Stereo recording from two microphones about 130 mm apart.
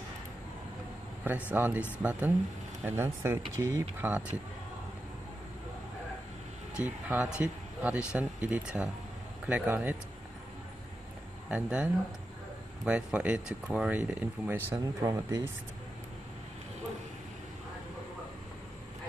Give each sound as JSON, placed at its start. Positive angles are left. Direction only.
{"t": 1.2, "sound": "speech", "side_deg": -15}
{"t": 6.7, "sound": "speech", "side_deg": -10}
{"t": 11.5, "sound": "speech", "side_deg": -10}